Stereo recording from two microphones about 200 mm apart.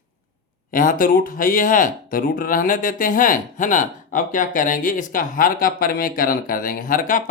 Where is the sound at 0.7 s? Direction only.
45° left (ahead or behind).